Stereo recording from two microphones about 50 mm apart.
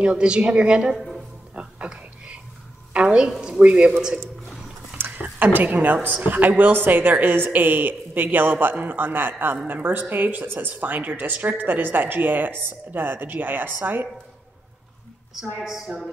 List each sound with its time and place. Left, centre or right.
0.0 s a woman's voice: right
1.5 s whispering: right
2.9 s a sound: right
3.3 s speech: centre
4.9 s a sound: right
6.0 s speech: right
15.6 s speech: centre